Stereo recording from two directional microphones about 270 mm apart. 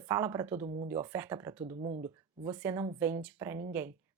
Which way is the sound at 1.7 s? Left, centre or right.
Right.